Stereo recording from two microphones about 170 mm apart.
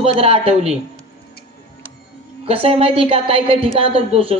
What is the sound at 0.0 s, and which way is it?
Speech, 35° right (ahead or behind).